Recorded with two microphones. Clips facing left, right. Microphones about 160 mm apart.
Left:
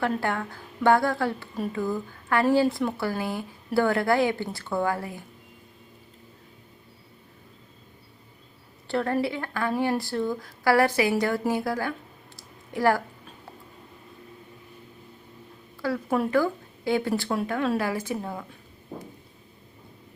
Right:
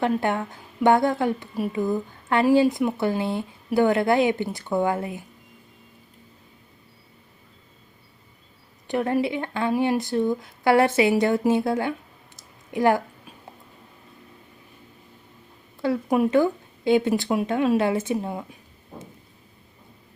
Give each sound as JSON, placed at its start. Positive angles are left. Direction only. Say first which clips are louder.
{"t": 0.0, "sound": "a woman's voice", "louder": "right 4 dB", "side_deg": -20}
{"t": 8.9, "sound": "a woman's voice", "louder": "right 3 dB", "side_deg": -15}
{"t": 12.4, "sound": "a sound", "louder": "right 3 dB", "side_deg": -20}
{"t": 15.8, "sound": "a woman's voice", "louder": "right 4 dB", "side_deg": -20}